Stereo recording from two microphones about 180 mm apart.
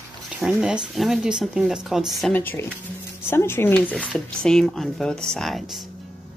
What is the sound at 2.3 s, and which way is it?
Speech, 10° left (ahead or behind).